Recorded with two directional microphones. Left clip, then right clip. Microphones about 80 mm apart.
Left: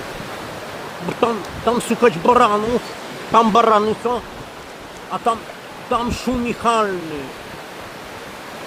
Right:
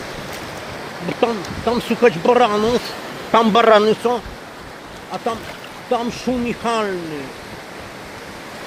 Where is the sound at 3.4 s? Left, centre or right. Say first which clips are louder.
Left 1 dB; centre.